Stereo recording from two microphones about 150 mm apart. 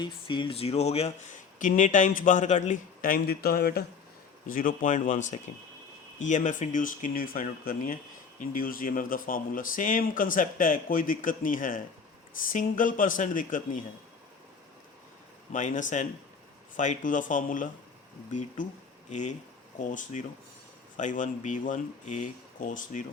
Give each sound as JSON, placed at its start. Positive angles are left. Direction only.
{"t": 0.0, "sound": "speech", "side_deg": 30}
{"t": 1.5, "sound": "speech", "side_deg": 60}
{"t": 4.4, "sound": "speech", "side_deg": 65}
{"t": 15.5, "sound": "speech", "side_deg": 55}